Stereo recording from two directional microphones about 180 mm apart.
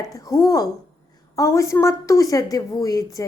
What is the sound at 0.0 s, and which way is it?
A woman's voice, 20° left (ahead or behind).